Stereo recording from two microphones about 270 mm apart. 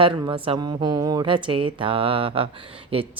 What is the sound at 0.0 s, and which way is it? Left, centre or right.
Speech, centre.